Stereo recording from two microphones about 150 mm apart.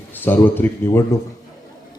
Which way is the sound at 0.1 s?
15° left (ahead or behind).